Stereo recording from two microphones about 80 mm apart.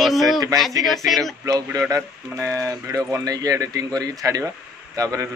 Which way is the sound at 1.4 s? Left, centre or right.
Right.